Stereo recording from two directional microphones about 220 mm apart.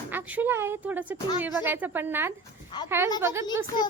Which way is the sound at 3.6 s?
20° left (ahead or behind).